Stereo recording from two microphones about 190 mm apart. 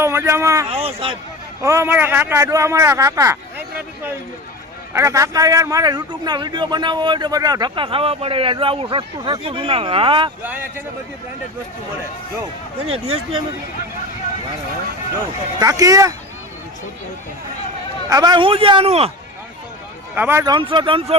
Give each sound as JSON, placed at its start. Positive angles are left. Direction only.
{"t": 0.0, "sound": "speech", "side_deg": -15}
{"t": 0.7, "sound": "speech", "side_deg": -30}
{"t": 1.6, "sound": "a man's voice", "side_deg": -15}
{"t": 4.9, "sound": "a man's voice", "side_deg": -15}
{"t": 10.4, "sound": "a man's voice", "side_deg": -10}
{"t": 12.8, "sound": "speech", "side_deg": -30}
{"t": 15.5, "sound": "a man's voice", "side_deg": -20}
{"t": 18.1, "sound": "a man's voice", "side_deg": -20}
{"t": 20.1, "sound": "a man's voice", "side_deg": -10}
{"t": 20.4, "sound": "a man's voice", "side_deg": -25}